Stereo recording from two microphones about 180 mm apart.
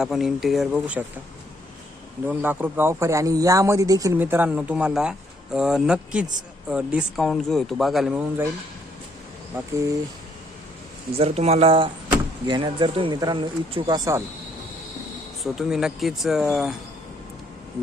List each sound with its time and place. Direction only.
0.0 s speech: centre (ahead or behind)
2.2 s speech: 10° right (ahead or behind)
9.5 s speech: 10° right (ahead or behind)
11.2 s speech: 35° right (ahead or behind)
15.4 s speech: 5° right (ahead or behind)